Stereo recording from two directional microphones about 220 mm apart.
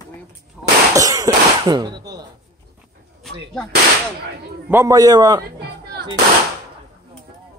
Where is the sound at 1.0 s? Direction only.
15° right (ahead or behind).